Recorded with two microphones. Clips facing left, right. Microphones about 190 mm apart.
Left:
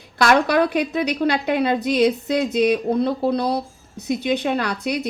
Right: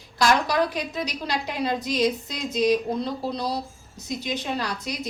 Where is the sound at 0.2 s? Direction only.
60° left (ahead or behind).